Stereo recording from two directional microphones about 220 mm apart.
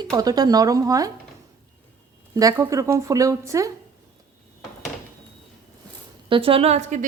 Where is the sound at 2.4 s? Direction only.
15° right (ahead or behind).